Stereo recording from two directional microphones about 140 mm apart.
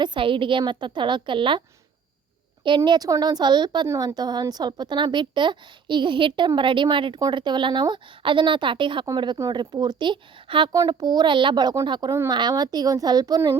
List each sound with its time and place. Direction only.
0.0 s a woman's voice: 35° right (ahead or behind)
2.6 s a woman's voice: 35° right (ahead or behind)